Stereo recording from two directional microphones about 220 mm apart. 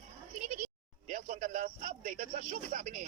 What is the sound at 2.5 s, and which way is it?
Speech, 35° right (ahead or behind).